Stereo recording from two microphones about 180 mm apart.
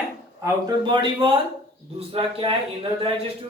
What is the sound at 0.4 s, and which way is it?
Speech, 15° right (ahead or behind).